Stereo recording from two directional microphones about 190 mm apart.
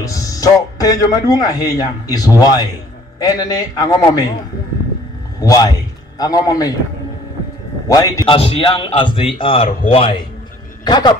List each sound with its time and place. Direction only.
0.0 s a man's voice: 20° left (ahead or behind)
5.4 s a man's voice: 20° left (ahead or behind)
7.9 s a man's voice: 15° left (ahead or behind)
8.3 s a man's voice: 30° left (ahead or behind)